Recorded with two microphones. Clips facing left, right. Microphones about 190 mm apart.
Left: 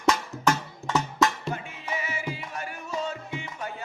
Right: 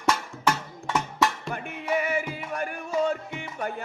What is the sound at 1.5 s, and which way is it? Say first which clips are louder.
Music: right 6 dB; 60° right (ahead or behind).